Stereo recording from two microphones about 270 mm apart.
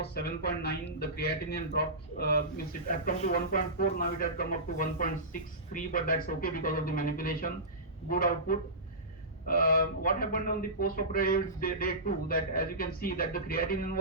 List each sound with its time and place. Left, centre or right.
0.0 s speech: left